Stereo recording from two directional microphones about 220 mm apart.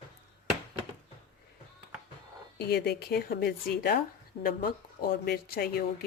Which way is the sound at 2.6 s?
45° left (ahead or behind).